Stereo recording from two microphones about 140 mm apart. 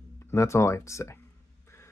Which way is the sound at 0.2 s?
20° left (ahead or behind).